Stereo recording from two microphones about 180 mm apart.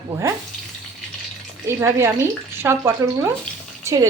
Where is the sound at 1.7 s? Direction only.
15° right (ahead or behind).